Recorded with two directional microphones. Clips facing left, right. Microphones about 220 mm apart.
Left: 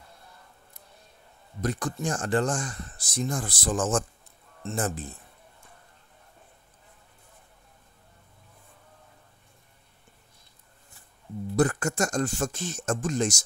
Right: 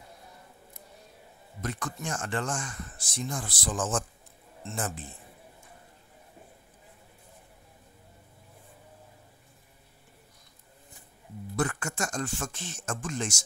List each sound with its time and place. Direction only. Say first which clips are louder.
1.6 s speech: left 6 dB; 35° left (ahead or behind)
11.5 s speech: left 7 dB; 40° left (ahead or behind)